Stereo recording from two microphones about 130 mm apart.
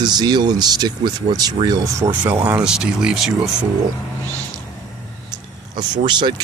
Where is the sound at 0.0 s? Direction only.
35° right (ahead or behind).